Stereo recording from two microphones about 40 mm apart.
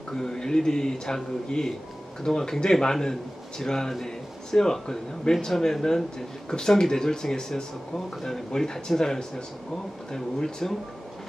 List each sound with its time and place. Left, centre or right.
0.1 s speech: centre